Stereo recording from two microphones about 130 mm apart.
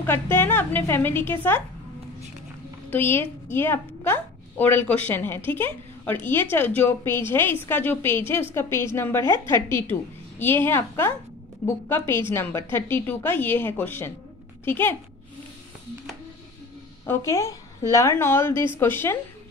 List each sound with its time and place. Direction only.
0.0 s a woman's voice: 20° left (ahead or behind)
2.9 s a woman's voice: 15° left (ahead or behind)
17.0 s a woman's voice: 20° left (ahead or behind)